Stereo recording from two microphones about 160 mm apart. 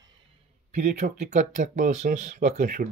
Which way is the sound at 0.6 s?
45° right (ahead or behind).